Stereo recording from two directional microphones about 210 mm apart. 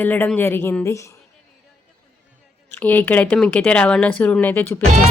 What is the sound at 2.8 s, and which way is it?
Speech, 10° left (ahead or behind).